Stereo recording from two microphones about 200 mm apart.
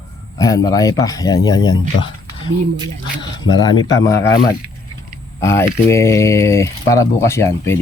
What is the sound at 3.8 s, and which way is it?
Speech, 15° left (ahead or behind).